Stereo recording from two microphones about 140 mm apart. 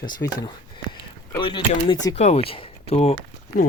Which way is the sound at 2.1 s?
50° left (ahead or behind).